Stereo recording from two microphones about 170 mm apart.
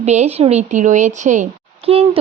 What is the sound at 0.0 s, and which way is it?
Speech, 40° right (ahead or behind).